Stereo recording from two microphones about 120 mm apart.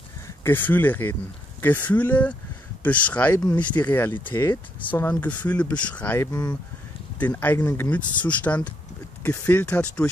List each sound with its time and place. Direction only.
0.4 s speech: 15° left (ahead or behind)